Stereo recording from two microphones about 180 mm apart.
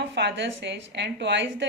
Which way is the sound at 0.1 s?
75° right (ahead or behind).